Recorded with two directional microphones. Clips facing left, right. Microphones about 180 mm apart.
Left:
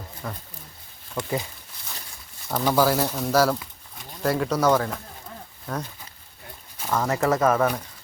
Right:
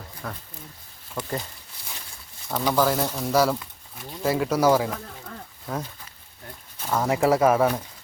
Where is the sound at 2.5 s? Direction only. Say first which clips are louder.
Left 1 dB; 5° left (ahead or behind).